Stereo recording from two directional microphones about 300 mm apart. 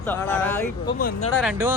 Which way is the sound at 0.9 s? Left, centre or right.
Left.